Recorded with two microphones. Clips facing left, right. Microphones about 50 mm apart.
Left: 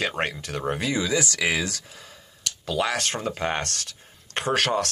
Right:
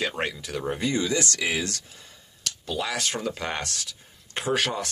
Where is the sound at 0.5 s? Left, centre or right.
Left.